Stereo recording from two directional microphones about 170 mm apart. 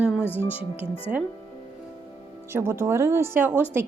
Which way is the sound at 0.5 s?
35° left (ahead or behind).